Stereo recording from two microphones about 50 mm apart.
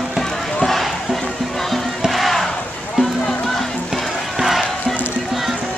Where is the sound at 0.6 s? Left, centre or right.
Centre.